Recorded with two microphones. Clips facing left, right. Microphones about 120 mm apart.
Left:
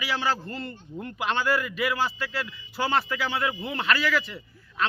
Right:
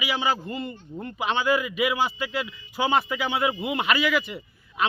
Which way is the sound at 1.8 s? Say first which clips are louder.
Right 2 dB; 20° right (ahead or behind).